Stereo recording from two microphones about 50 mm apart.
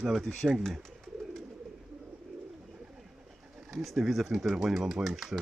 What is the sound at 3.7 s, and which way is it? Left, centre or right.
Speech, centre.